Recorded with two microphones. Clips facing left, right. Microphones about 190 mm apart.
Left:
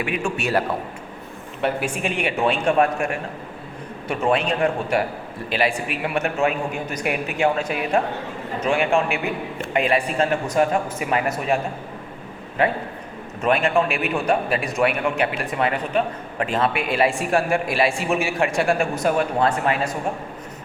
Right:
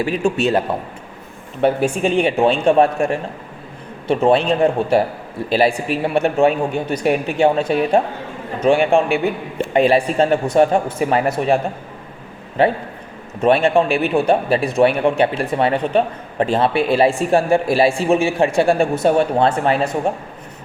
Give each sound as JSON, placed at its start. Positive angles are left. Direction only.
{"t": 0.0, "sound": "a man's voice", "side_deg": -35}
{"t": 0.3, "sound": "a man's voice", "side_deg": -20}
{"t": 1.6, "sound": "a man's voice", "side_deg": -30}